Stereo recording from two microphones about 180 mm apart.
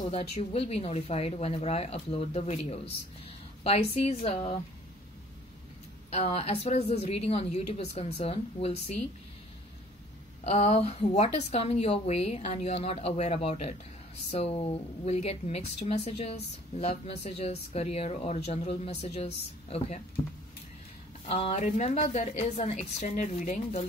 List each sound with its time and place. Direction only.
0.1 s a woman's voice: 35° left (ahead or behind)
6.0 s a woman's voice: 35° left (ahead or behind)
10.4 s a woman's voice: 35° left (ahead or behind)
21.3 s a woman's voice: 35° left (ahead or behind)